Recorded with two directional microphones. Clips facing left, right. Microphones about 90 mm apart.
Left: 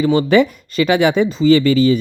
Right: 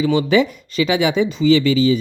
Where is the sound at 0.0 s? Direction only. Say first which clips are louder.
Left 3 dB; 45° left (ahead or behind).